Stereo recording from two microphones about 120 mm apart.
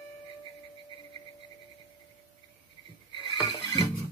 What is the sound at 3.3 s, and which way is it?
Music, 35° left (ahead or behind).